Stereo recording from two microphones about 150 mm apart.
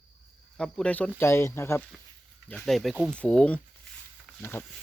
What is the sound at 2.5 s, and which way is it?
Speech, 5° left (ahead or behind).